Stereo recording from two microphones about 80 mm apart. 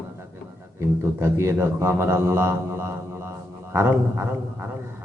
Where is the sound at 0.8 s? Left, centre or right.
Right.